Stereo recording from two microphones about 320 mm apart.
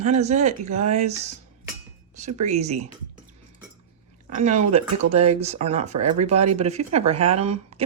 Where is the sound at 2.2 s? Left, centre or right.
Right.